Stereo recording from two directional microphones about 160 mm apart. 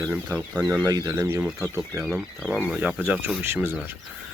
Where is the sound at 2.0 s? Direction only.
5° right (ahead or behind).